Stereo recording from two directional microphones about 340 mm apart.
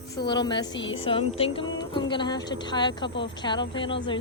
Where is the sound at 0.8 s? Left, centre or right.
Left.